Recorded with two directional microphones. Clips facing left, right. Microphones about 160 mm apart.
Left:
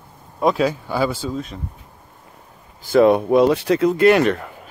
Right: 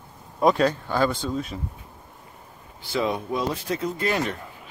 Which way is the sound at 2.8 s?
55° left (ahead or behind).